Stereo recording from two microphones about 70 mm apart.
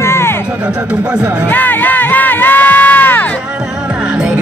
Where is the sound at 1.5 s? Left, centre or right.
Left.